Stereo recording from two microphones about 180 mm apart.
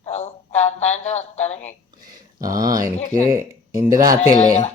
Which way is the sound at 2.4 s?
20° right (ahead or behind).